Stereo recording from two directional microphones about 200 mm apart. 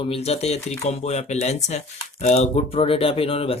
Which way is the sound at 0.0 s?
30° left (ahead or behind).